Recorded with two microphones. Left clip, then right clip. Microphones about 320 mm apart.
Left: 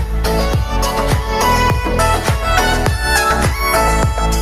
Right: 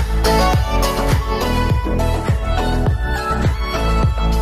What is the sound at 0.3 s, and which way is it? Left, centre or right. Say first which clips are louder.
Music: right 3 dB; centre.